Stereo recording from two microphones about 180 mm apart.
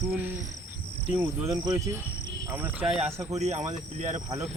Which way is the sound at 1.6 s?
15° right (ahead or behind).